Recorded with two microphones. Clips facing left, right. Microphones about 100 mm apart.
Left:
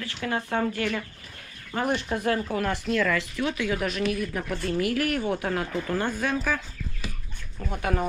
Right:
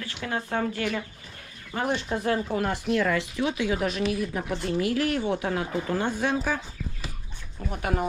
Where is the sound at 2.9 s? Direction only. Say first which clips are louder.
Right 1 dB; 25° right (ahead or behind).